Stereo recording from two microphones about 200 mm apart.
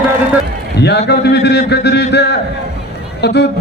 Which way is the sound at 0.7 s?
55° left (ahead or behind).